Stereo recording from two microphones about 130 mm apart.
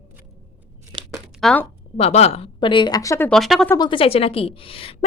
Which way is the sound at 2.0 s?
55° left (ahead or behind).